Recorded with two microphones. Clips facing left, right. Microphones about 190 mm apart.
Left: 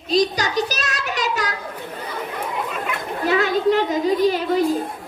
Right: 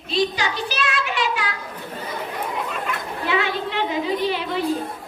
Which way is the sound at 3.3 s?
40° left (ahead or behind).